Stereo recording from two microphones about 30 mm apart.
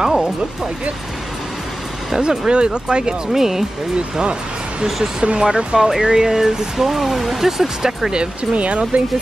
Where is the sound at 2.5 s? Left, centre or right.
Right.